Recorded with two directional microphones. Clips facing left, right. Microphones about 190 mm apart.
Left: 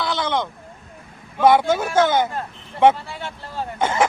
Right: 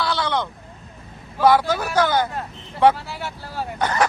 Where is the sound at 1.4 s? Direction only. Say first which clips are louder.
Left 2 dB; 25° left (ahead or behind).